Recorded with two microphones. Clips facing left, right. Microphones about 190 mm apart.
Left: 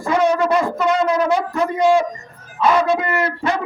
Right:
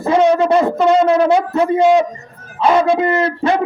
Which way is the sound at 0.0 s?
30° right (ahead or behind).